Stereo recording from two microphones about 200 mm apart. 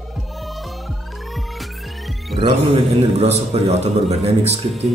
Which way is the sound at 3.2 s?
35° right (ahead or behind).